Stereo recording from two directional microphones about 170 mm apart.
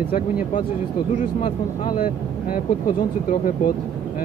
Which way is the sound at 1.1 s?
50° left (ahead or behind).